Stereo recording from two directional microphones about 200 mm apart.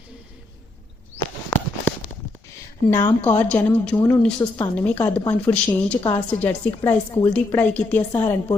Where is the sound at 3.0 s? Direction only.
10° left (ahead or behind).